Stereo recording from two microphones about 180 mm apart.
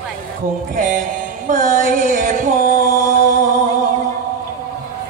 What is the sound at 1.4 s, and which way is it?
Female singing, 45° right (ahead or behind).